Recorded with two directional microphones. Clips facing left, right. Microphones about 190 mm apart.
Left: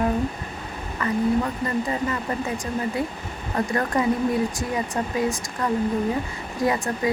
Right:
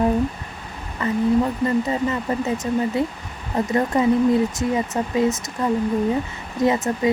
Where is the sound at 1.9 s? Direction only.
25° right (ahead or behind).